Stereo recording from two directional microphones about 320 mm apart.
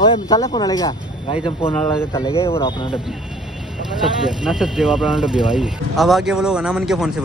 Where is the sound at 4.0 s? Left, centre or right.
Centre.